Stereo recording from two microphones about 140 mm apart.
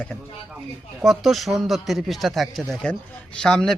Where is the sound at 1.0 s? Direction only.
Centre (ahead or behind).